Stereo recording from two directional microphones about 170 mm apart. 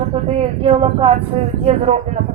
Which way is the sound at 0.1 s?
35° right (ahead or behind).